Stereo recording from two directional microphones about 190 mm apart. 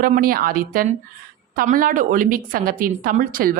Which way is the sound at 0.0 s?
50° right (ahead or behind).